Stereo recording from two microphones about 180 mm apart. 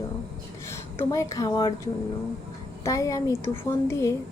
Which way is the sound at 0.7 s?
15° left (ahead or behind).